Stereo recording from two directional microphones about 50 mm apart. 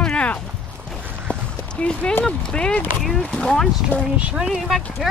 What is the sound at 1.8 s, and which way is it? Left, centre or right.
Speech, centre.